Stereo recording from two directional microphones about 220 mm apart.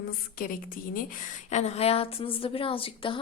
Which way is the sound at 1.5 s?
30° left (ahead or behind).